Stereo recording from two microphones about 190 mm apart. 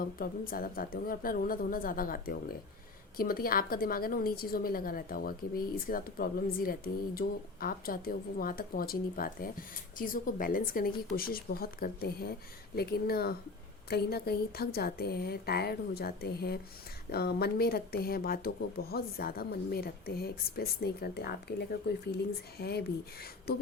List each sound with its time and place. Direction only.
0.2 s a woman's voice: 50° left (ahead or behind)